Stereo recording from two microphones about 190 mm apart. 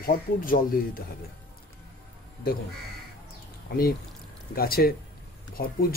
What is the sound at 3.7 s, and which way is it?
Speech, 50° left (ahead or behind).